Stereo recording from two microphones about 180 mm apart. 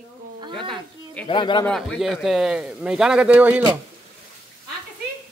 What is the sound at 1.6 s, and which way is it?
A man's voice, centre (ahead or behind).